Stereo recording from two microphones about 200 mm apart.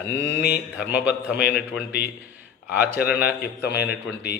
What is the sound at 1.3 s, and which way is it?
A man's voice, 55° left (ahead or behind).